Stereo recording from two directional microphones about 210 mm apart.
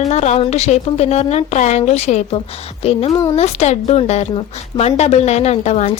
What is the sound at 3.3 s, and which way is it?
Speech, 30° left (ahead or behind).